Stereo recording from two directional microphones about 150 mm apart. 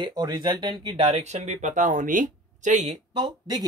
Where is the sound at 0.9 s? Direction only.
45° right (ahead or behind).